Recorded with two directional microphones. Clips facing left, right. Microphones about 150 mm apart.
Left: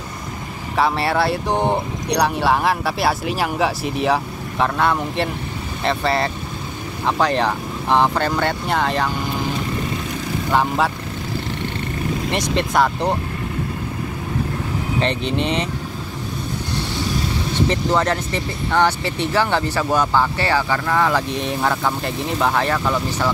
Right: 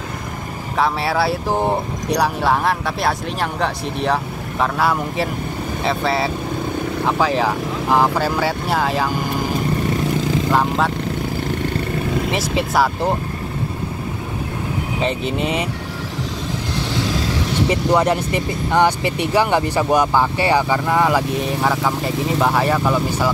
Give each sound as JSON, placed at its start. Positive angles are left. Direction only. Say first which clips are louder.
{"t": 0.7, "sound": "speech", "louder": "even", "side_deg": 0}
{"t": 10.5, "sound": "speech", "louder": "left 1 dB", "side_deg": 0}
{"t": 12.3, "sound": "speech", "louder": "even", "side_deg": -5}
{"t": 15.0, "sound": "speech", "louder": "even", "side_deg": -5}
{"t": 17.0, "sound": "vehicle", "louder": "right 1 dB", "side_deg": -90}
{"t": 17.6, "sound": "speech", "louder": "right 3 dB", "side_deg": -10}